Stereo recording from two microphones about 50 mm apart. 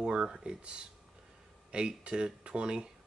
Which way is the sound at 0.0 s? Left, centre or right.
Centre.